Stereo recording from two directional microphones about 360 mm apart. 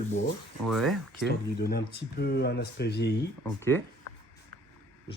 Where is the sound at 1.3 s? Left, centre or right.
Left.